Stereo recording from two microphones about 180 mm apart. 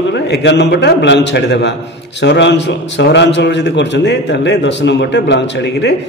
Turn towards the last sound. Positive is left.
turn(degrees=75)  # may be behind; listen again after turning